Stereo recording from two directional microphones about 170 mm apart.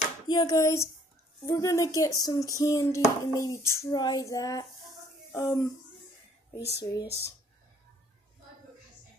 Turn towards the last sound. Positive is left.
turn(degrees=20)  # may be behind; listen again after turning